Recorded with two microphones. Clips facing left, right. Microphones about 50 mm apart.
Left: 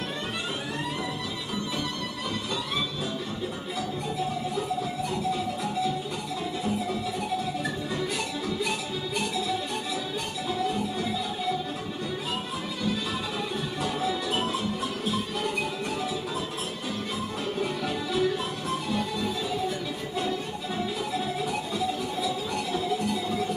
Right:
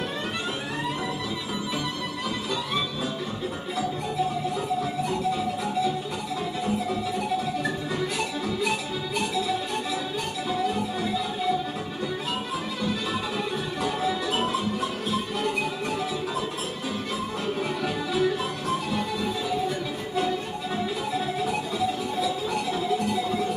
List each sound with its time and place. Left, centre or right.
8.0 s music: centre
10.5 s music: centre
13.8 s music: centre
17.6 s music: centre
21.1 s music: centre